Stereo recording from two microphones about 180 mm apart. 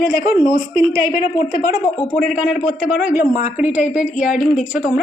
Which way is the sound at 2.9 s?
50° left (ahead or behind).